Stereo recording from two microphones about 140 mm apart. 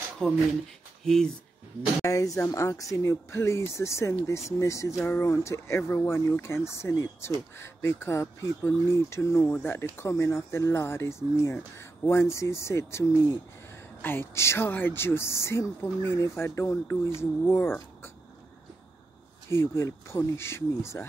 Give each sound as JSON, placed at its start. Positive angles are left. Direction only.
{"t": 0.2, "sound": "speech", "side_deg": 5}
{"t": 2.0, "sound": "speech", "side_deg": 25}
{"t": 19.5, "sound": "speech", "side_deg": 20}